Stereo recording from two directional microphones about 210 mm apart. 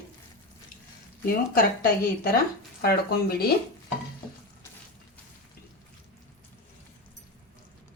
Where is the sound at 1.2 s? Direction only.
45° left (ahead or behind).